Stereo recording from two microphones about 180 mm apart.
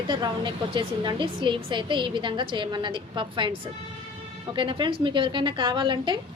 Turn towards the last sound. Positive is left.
turn(degrees=-25)  # may be behind; listen again after turning